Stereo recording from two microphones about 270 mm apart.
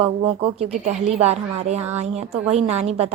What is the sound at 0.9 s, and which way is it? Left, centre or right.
A woman's voice, right.